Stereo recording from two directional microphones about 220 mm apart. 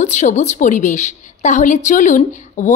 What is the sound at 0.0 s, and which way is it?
A woman's voice, 35° left (ahead or behind).